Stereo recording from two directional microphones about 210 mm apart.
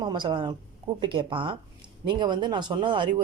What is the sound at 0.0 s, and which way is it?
Speech, 20° right (ahead or behind).